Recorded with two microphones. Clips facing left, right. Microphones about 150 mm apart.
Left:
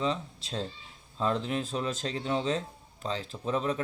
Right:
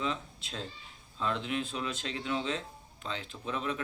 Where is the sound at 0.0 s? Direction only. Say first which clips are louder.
Left 4 dB; 35° left (ahead or behind).